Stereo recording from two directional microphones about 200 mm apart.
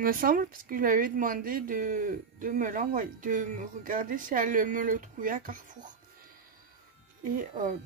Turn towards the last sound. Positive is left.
turn(degrees=-40)  # may be behind; listen again after turning